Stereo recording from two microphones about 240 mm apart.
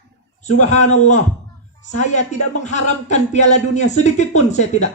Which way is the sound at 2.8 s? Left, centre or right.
Left.